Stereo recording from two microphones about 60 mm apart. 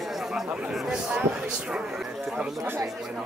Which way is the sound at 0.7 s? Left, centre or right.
Centre.